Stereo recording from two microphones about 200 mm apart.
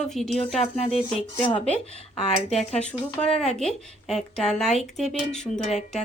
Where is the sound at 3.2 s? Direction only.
5° left (ahead or behind).